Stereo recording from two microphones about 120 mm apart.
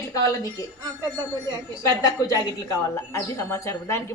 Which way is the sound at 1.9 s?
30° left (ahead or behind).